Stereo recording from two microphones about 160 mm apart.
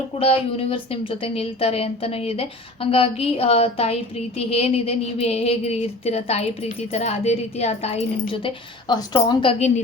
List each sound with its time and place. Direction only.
0.2 s speech: 35° left (ahead or behind)